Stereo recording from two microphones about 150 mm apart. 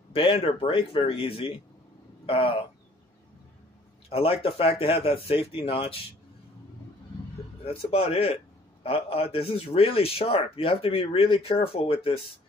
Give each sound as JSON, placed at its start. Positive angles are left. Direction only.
{"t": 0.1, "sound": "a man's voice", "side_deg": 40}
{"t": 4.1, "sound": "a man's voice", "side_deg": 40}
{"t": 7.6, "sound": "a man's voice", "side_deg": 40}